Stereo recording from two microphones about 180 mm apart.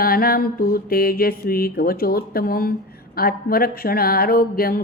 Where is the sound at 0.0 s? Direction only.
55° left (ahead or behind).